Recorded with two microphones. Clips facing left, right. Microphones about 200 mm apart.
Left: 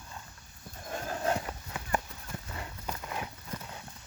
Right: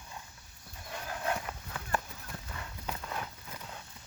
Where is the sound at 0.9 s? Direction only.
45° left (ahead or behind).